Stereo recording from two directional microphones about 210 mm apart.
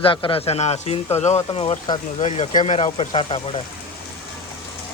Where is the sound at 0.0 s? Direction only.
25° left (ahead or behind).